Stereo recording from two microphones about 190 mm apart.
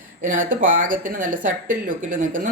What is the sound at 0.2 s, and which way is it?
Speech, 45° right (ahead or behind).